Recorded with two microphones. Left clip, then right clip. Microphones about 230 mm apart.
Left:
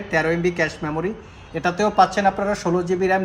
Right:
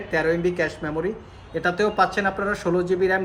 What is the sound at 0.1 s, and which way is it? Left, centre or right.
Speech, left.